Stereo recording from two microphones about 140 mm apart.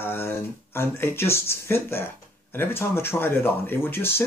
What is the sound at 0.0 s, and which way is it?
Speech, 15° left (ahead or behind).